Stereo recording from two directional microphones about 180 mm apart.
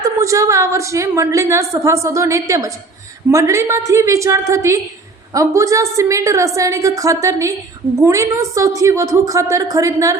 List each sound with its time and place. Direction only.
0.0 s a woman's voice: 20° right (ahead or behind)